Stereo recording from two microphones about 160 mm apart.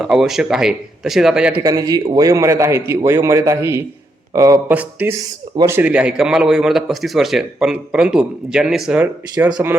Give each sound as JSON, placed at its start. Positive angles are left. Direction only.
{"t": 0.0, "sound": "speech", "side_deg": -5}
{"t": 1.6, "sound": "a man's voice", "side_deg": -20}
{"t": 4.7, "sound": "a man's voice", "side_deg": -10}